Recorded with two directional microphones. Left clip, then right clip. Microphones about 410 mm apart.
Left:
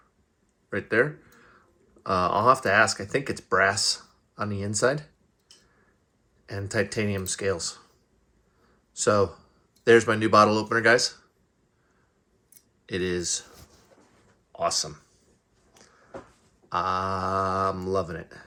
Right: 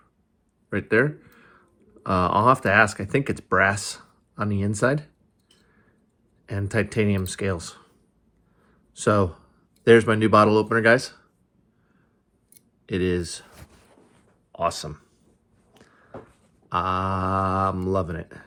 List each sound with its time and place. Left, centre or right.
0.7 s a sound: centre
2.0 s speech: centre
6.4 s speech: centre
8.9 s a man's voice: centre
12.8 s speech: centre
14.5 s speech: centre
15.7 s a sound: centre
16.6 s speech: centre